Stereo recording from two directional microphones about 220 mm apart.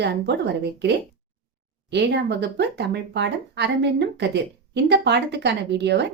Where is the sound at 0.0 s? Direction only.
50° right (ahead or behind).